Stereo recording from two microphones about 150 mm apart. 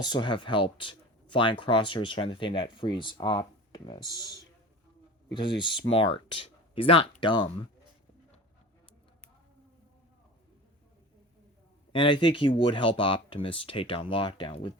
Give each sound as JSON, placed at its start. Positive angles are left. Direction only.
{"t": 0.0, "sound": "speech", "side_deg": 30}
{"t": 5.3, "sound": "speech", "side_deg": 30}
{"t": 11.9, "sound": "speech", "side_deg": 35}